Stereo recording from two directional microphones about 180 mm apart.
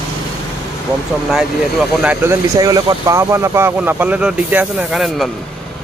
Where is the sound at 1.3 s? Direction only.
Centre (ahead or behind).